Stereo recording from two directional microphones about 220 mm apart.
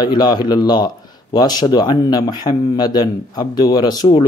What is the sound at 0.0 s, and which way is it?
Speech, 20° left (ahead or behind).